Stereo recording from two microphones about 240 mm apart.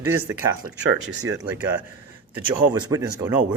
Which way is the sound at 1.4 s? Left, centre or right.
Centre.